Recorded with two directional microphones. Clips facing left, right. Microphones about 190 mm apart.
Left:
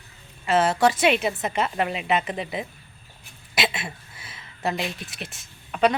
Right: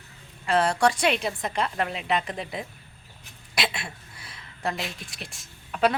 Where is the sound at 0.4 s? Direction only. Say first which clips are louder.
Left 2 dB; 5° left (ahead or behind).